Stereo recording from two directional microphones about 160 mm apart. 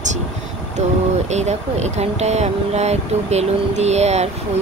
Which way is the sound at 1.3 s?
45° right (ahead or behind).